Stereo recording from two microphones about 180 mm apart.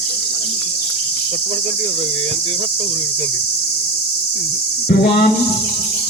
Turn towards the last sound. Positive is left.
turn(degrees=60)  # may be behind; listen again after turning